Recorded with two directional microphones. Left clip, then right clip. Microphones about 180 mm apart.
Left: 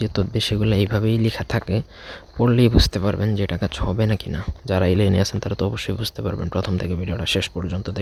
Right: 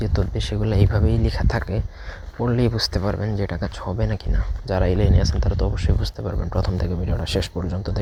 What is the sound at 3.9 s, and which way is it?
Speech, 65° left (ahead or behind).